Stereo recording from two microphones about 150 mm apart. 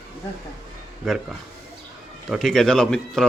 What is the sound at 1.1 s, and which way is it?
Speech, centre (ahead or behind).